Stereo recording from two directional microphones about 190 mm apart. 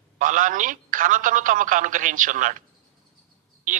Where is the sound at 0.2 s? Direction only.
45° right (ahead or behind).